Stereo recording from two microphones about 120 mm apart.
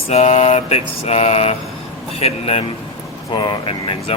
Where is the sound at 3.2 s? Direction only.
40° left (ahead or behind).